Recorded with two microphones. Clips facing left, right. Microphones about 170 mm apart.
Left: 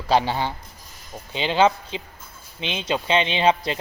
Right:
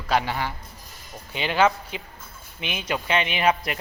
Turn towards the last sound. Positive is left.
turn(degrees=25)  # may be behind; listen again after turning